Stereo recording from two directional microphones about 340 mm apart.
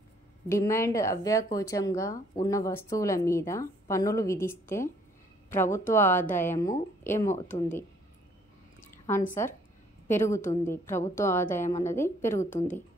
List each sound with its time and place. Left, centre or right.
0.5 s speech: centre
8.8 s drip: centre
10.0 s a woman's voice: centre